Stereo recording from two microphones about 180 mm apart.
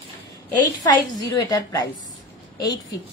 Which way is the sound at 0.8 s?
20° left (ahead or behind).